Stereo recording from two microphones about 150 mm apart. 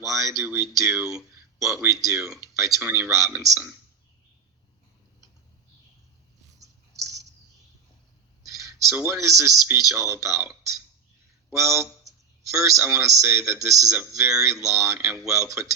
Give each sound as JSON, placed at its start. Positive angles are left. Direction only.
{"t": 0.0, "sound": "speech", "side_deg": -20}
{"t": 0.9, "sound": "speech", "side_deg": -5}
{"t": 1.5, "sound": "speech", "side_deg": -20}
{"t": 6.6, "sound": "a sound", "side_deg": -20}
{"t": 8.4, "sound": "a sound", "side_deg": -20}
{"t": 9.1, "sound": "speech", "side_deg": 0}
{"t": 9.6, "sound": "speech", "side_deg": -20}
{"t": 11.5, "sound": "a sound", "side_deg": -20}
{"t": 12.7, "sound": "speech", "side_deg": -20}